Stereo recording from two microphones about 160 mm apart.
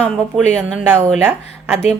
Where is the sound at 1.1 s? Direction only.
15° right (ahead or behind).